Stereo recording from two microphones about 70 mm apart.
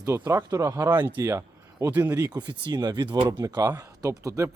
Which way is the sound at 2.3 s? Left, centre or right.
Right.